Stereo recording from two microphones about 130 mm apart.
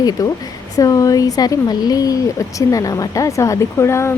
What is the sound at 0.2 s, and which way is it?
Speech, 25° left (ahead or behind).